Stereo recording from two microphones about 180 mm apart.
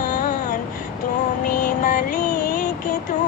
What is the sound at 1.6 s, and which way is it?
Music, 50° left (ahead or behind).